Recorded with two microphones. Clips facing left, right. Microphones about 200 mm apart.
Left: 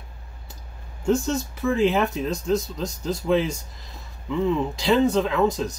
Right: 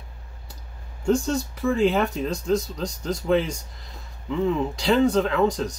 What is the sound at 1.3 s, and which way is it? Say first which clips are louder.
Speech: even; 5° left (ahead or behind).